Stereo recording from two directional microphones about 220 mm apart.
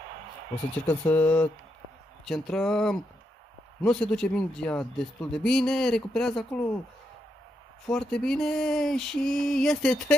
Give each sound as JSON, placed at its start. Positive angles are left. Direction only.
{"t": 0.8, "sound": "speech", "side_deg": 5}
{"t": 7.8, "sound": "speech", "side_deg": 0}